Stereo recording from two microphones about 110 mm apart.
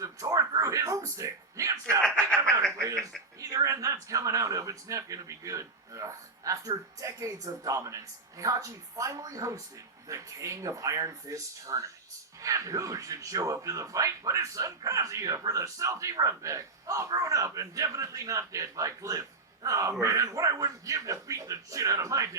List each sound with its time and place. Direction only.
0.0 s a sound: 30° right (ahead or behind)
2.0 s speech: 10° left (ahead or behind)
2.4 s snicker: 25° right (ahead or behind)
3.3 s speech: 30° right (ahead or behind)